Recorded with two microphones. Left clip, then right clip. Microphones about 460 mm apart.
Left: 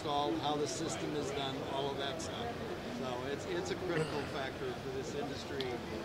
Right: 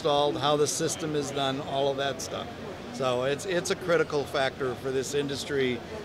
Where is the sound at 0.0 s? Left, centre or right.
Right.